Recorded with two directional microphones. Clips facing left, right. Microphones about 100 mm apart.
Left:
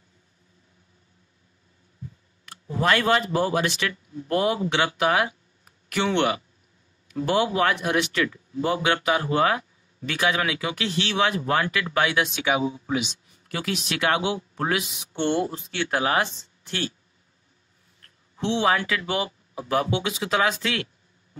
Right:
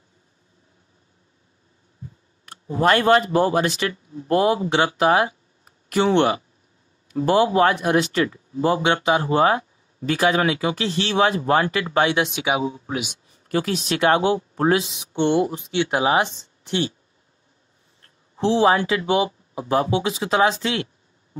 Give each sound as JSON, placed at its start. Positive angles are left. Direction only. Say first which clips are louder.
{"t": 2.8, "sound": "speech", "louder": "right 5 dB", "side_deg": -40}
{"t": 12.4, "sound": "speech", "louder": "right 1 dB", "side_deg": -10}
{"t": 13.3, "sound": "speech", "louder": "right 9 dB", "side_deg": -40}
{"t": 18.0, "sound": "speech", "louder": "right 6 dB", "side_deg": -30}